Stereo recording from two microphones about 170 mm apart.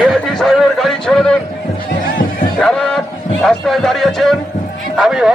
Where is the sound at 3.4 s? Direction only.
Centre (ahead or behind).